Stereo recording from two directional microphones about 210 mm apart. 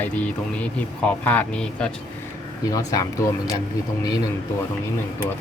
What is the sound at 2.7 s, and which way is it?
Speech, 15° left (ahead or behind).